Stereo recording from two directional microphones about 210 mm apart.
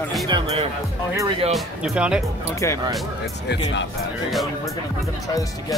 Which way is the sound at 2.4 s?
15° left (ahead or behind).